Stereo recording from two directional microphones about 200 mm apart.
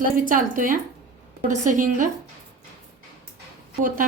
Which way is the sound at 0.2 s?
40° right (ahead or behind).